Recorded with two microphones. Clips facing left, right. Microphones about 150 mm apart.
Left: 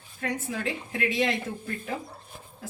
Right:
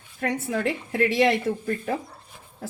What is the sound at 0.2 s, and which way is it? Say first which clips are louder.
Speech: right 6 dB; 65° right (ahead or behind).